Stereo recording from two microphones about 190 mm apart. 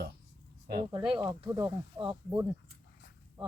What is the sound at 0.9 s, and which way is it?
Speech, 25° right (ahead or behind).